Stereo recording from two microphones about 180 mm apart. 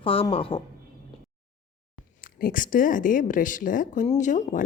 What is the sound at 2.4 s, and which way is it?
A woman's voice, 50° left (ahead or behind).